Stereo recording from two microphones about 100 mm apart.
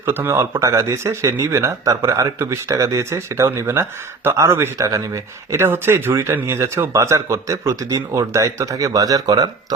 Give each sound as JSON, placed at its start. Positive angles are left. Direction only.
{"t": 0.0, "sound": "speech", "side_deg": -20}